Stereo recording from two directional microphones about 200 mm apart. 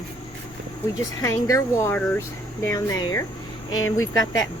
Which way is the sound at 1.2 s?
15° left (ahead or behind).